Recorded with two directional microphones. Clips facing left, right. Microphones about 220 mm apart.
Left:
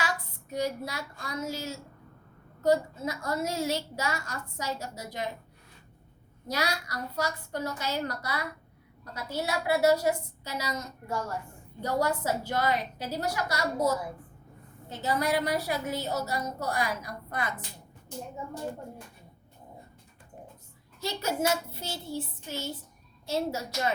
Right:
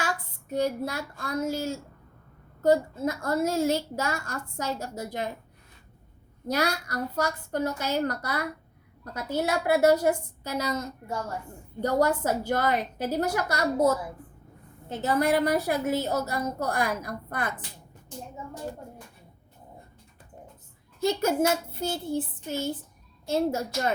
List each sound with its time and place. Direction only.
0.5 s a woman's voice: 50° right (ahead or behind)
6.5 s a woman's voice: 50° right (ahead or behind)
11.8 s a woman's voice: 50° right (ahead or behind)
21.0 s a woman's voice: 50° right (ahead or behind)